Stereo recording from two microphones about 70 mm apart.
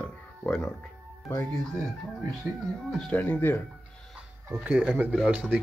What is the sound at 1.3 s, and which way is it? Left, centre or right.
Speech, left.